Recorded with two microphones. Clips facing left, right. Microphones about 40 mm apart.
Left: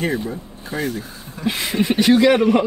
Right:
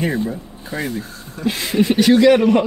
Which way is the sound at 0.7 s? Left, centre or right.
Centre.